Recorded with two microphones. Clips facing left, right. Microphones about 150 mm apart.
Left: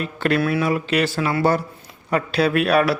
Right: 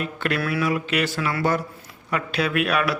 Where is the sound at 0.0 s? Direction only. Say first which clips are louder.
Left 5 dB; 35° left (ahead or behind).